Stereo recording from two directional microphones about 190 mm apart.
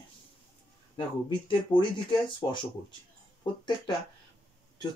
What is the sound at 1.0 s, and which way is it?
Speech, 25° left (ahead or behind).